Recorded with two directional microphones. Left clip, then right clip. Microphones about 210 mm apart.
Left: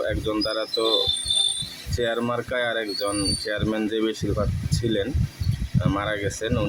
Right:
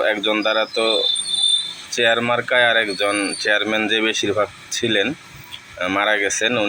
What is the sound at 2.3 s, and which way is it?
Speech, 15° left (ahead or behind).